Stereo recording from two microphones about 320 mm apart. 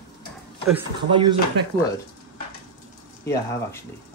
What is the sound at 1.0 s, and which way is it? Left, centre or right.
Speech, centre.